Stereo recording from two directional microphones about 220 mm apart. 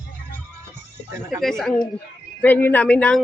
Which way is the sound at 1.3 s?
Centre (ahead or behind).